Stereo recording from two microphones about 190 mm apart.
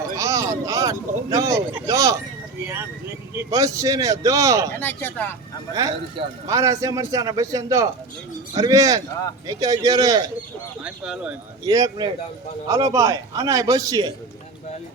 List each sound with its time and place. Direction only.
0.2 s a sound: 15° right (ahead or behind)
0.6 s a man's voice: 15° right (ahead or behind)
4.8 s speech: 10° left (ahead or behind)
5.7 s a man's voice: 15° right (ahead or behind)
10.8 s speech: 5° right (ahead or behind)
11.6 s a man's voice: 20° right (ahead or behind)